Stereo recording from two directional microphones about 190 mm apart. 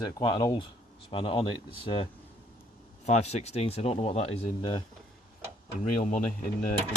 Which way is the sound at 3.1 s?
35° left (ahead or behind).